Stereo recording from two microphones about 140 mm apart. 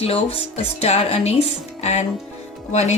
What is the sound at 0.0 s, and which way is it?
A woman's voice, 45° left (ahead or behind).